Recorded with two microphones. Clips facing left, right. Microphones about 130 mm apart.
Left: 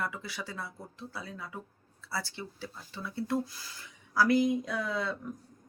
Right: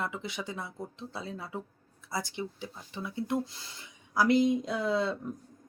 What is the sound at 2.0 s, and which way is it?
Speech, 15° right (ahead or behind).